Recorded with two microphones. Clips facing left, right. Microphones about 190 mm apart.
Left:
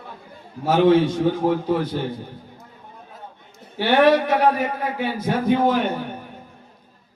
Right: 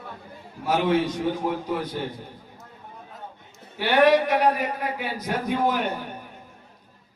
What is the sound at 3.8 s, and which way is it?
A man's voice, 25° left (ahead or behind).